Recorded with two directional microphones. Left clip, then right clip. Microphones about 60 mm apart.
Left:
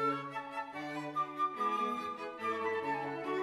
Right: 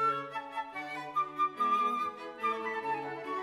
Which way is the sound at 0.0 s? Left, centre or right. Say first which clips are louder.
Right 3 dB; left.